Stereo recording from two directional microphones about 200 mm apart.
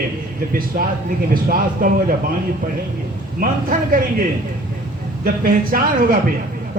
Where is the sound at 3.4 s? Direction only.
45° right (ahead or behind).